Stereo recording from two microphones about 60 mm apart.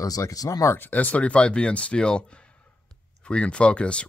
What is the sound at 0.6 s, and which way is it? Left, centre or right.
Speech, left.